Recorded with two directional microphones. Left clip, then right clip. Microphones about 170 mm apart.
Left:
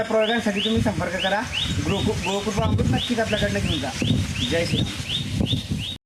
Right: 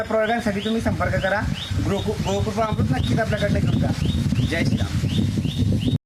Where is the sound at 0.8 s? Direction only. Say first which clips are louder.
Right 1 dB; 10° right (ahead or behind).